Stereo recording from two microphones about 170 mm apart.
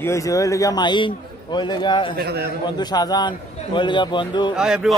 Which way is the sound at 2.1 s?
70° right (ahead or behind).